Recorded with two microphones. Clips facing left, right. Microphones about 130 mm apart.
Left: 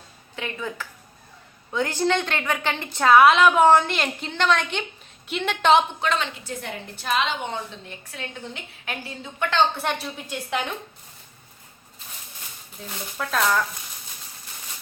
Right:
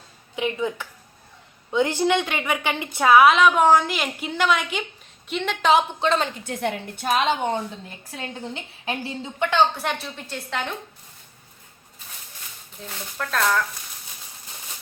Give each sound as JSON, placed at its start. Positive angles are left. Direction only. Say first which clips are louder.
{"t": 0.3, "sound": "a woman's voice", "louder": "right 6 dB", "side_deg": -20}
{"t": 6.0, "sound": "a woman's voice", "louder": "right 3 dB", "side_deg": -30}
{"t": 6.2, "sound": "a woman's voice", "louder": "right 6 dB", "side_deg": -55}
{"t": 9.8, "sound": "a woman's voice", "louder": "left 1 dB", "side_deg": 10}
{"t": 12.8, "sound": "a woman's voice", "louder": "even", "side_deg": 5}